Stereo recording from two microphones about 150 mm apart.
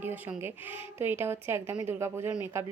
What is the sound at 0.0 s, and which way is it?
Speech, 15° right (ahead or behind).